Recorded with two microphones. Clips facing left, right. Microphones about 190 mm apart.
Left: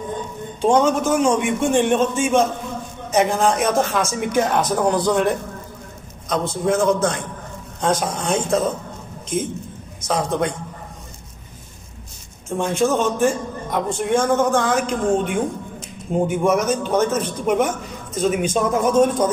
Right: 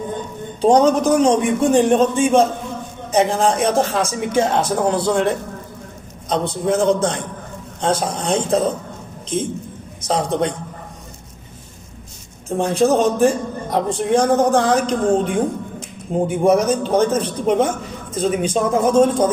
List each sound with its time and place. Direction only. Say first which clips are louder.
0.6 s a man's voice: right 3 dB; 35° right (ahead or behind)
10.0 s a man's voice: right 2 dB; 30° right (ahead or behind)
12.4 s a man's voice: right 3 dB; 35° right (ahead or behind)